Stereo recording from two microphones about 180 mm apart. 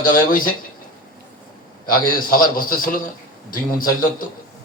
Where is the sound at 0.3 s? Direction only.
50° left (ahead or behind).